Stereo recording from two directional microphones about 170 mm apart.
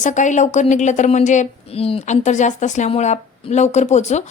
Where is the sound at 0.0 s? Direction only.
45° left (ahead or behind).